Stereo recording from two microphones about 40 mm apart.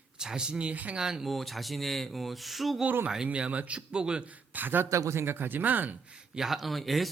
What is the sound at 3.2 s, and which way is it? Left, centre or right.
Speech, right.